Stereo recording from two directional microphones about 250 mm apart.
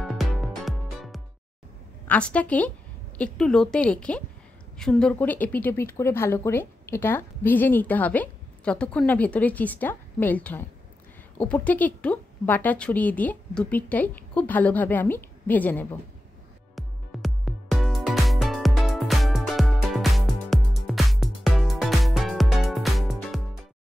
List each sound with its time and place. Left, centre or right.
0.0 s music: centre
2.0 s a woman's voice: centre
16.7 s music: centre